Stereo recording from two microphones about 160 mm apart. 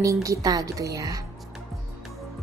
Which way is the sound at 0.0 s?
20° right (ahead or behind).